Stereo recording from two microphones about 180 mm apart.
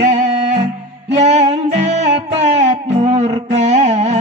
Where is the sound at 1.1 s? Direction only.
40° right (ahead or behind).